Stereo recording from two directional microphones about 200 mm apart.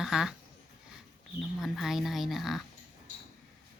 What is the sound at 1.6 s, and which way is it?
Speech, centre (ahead or behind).